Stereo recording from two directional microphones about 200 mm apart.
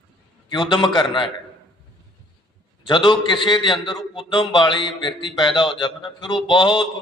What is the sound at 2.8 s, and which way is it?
A man's voice, 25° left (ahead or behind).